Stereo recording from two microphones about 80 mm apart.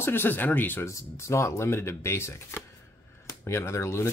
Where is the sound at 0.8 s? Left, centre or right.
Left.